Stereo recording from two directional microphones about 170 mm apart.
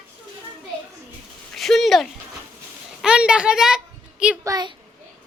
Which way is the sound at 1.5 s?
Centre (ahead or behind).